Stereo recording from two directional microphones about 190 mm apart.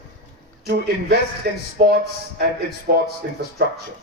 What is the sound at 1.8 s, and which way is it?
Speech, 55° right (ahead or behind).